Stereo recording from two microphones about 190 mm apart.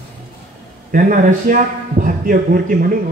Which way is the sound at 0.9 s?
45° right (ahead or behind).